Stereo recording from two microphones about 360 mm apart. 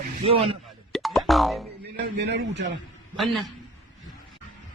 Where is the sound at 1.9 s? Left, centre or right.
Right.